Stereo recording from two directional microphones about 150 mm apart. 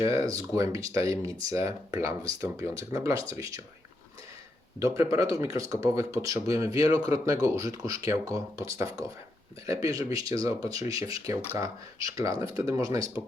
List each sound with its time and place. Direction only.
0.0 s speech: 20° right (ahead or behind)
4.9 s speech: 20° right (ahead or behind)